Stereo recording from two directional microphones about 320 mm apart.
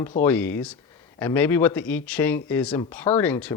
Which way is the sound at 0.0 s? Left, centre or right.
Centre.